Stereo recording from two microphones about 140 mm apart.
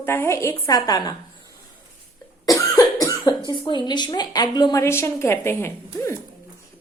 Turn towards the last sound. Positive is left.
turn(degrees=20)  # may be behind; listen again after turning